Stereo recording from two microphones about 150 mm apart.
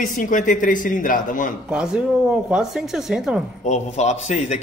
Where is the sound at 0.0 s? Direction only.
60° left (ahead or behind).